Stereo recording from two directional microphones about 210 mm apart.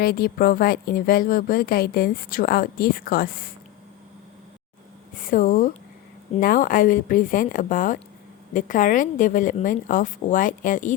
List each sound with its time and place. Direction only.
0.0 s a woman's voice: 45° left (ahead or behind)
5.1 s a woman's voice: 40° left (ahead or behind)